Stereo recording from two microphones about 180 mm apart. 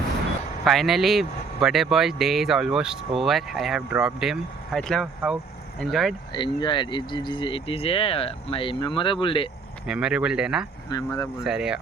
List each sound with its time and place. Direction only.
0.6 s speech: centre (ahead or behind)
6.3 s speech: 25° left (ahead or behind)
9.8 s speech: 5° right (ahead or behind)
10.8 s speech: 20° left (ahead or behind)
11.3 s speech: 5° right (ahead or behind)